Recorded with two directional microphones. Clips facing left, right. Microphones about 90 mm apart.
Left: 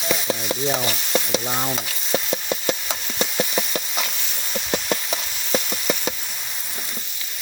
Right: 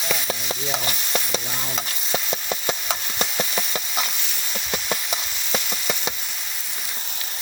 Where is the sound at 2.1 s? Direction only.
5° right (ahead or behind).